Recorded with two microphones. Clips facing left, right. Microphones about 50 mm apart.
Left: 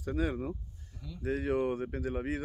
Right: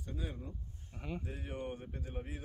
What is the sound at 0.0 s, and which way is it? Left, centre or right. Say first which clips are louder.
Speech: left 12 dB; left.